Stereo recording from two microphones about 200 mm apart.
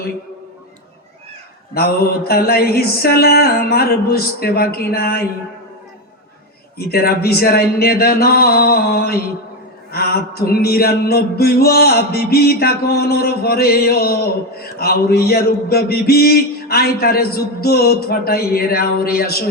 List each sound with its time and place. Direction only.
1.7 s mantra: 50° left (ahead or behind)
6.7 s mantra: 50° left (ahead or behind)